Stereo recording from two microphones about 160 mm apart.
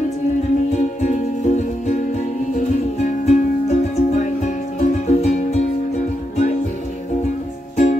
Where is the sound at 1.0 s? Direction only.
50° left (ahead or behind).